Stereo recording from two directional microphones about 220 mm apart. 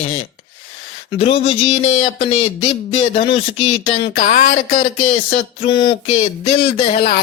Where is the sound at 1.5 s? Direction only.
25° left (ahead or behind).